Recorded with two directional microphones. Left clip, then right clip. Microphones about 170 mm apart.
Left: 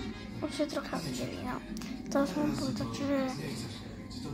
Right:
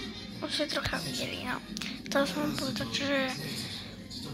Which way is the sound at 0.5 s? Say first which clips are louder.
Right 3 dB; 10° left (ahead or behind).